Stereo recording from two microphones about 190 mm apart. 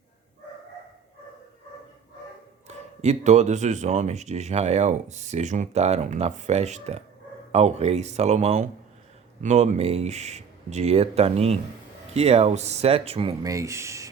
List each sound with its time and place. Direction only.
2.6 s speech: 35° right (ahead or behind)
13.4 s speech: 15° right (ahead or behind)